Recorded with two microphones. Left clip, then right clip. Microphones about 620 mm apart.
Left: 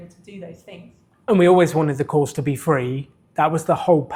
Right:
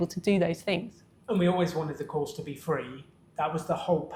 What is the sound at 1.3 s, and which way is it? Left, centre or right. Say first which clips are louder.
Speech: left 13 dB; left.